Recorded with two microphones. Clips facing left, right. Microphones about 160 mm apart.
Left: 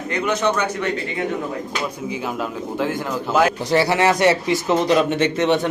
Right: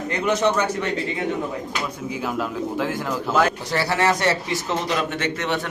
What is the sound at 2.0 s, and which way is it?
A man's voice, centre (ahead or behind).